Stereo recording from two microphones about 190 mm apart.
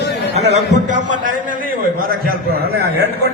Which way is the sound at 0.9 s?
40° right (ahead or behind).